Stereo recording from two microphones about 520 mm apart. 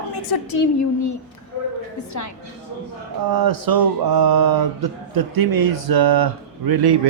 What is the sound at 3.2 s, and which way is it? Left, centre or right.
Speech, right.